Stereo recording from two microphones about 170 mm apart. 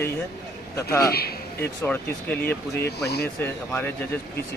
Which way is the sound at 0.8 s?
65° left (ahead or behind).